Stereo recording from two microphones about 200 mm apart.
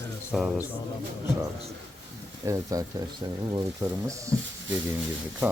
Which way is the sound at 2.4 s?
15° right (ahead or behind).